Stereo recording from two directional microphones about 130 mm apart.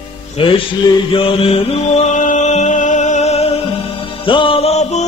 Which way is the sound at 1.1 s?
45° left (ahead or behind).